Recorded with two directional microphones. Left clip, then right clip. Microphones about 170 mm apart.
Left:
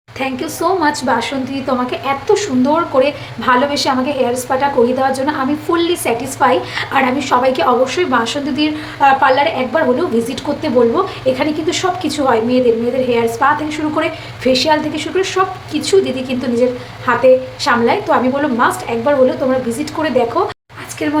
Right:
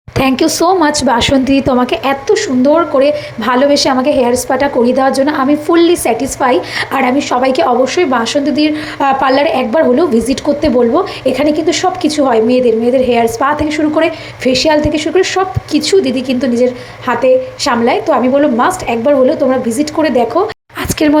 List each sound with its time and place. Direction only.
0.2 s a woman's voice: 40° right (ahead or behind)
2.2 s a woman's voice: 25° right (ahead or behind)
21.0 s a woman's voice: 45° right (ahead or behind)